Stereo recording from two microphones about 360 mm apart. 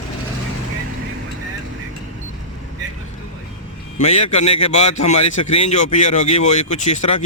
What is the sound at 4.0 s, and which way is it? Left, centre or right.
A man's voice, centre.